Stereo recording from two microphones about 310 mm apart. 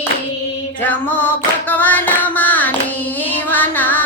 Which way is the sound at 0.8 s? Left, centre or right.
Centre.